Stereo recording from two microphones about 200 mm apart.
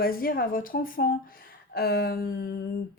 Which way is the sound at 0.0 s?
50° left (ahead or behind).